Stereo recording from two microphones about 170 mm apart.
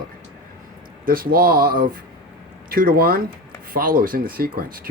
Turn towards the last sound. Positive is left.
turn(degrees=-60)  # may be behind; listen again after turning